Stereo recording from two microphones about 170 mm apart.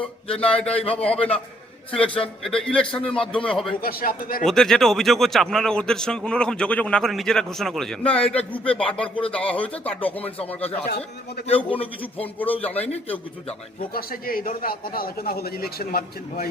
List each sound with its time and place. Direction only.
0.0 s a man's voice: 5° left (ahead or behind)
2.9 s a man's voice: 30° left (ahead or behind)
3.2 s a man's voice: 5° left (ahead or behind)
3.8 s speech: 60° left (ahead or behind)
4.4 s a man's voice: centre (ahead or behind)
8.6 s a man's voice: 30° left (ahead or behind)
8.9 s speech: 10° left (ahead or behind)
10.4 s a man's voice: 35° left (ahead or behind)
13.9 s speech: 60° left (ahead or behind)